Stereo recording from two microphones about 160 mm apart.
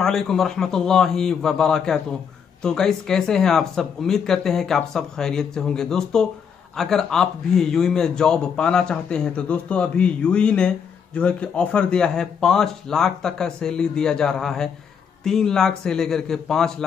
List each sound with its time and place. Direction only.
0.0 s a man's voice: centre (ahead or behind)